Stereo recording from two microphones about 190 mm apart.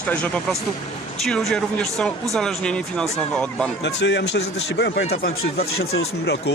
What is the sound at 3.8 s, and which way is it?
Speech, 65° left (ahead or behind).